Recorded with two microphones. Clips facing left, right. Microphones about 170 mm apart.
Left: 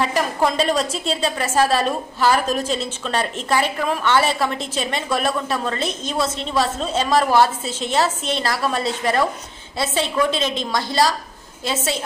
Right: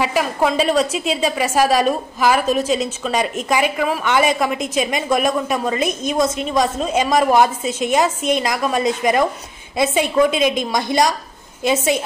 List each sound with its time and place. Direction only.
0.0 s a woman's voice: 5° right (ahead or behind)